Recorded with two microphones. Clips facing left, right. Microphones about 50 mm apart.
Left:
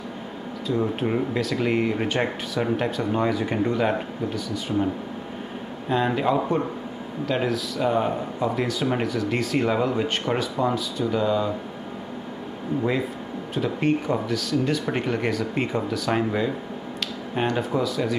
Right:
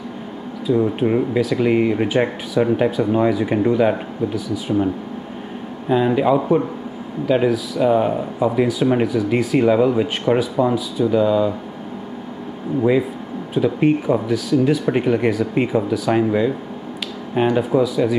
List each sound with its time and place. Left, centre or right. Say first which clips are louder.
0.7 s speech: right 7 dB; centre
5.9 s speech: right 6 dB; centre
13.6 s speech: right 7 dB; centre